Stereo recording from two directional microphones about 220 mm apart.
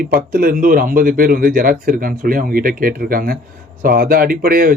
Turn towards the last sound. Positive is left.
turn(degrees=-40)  # may be behind; listen again after turning